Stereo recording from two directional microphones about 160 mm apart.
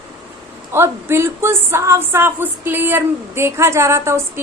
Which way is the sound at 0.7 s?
15° right (ahead or behind).